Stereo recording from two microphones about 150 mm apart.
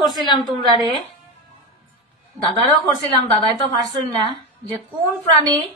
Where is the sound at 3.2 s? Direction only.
30° right (ahead or behind).